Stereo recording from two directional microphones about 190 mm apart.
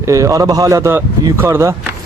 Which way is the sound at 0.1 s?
15° right (ahead or behind).